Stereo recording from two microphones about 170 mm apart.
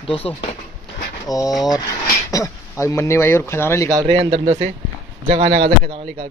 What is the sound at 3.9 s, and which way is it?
A man's voice, 25° right (ahead or behind).